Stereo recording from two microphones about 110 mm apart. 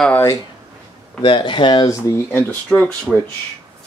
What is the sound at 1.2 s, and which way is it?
Speech, 45° left (ahead or behind).